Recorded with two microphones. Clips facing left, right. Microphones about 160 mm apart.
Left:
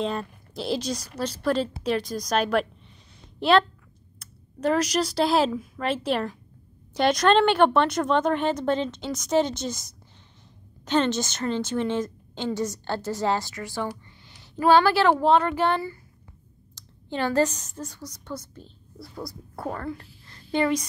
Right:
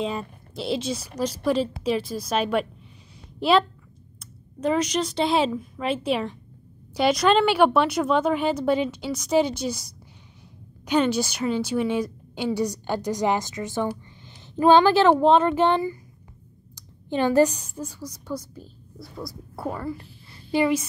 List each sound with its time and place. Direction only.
0.0 s a woman's voice: 5° right (ahead or behind)
4.6 s a woman's voice: 5° left (ahead or behind)
10.9 s a woman's voice: 10° right (ahead or behind)